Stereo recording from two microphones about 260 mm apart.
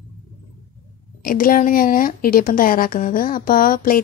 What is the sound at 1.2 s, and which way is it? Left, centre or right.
Speech, left.